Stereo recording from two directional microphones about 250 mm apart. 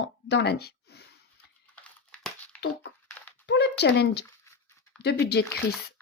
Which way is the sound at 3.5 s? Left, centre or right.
Left.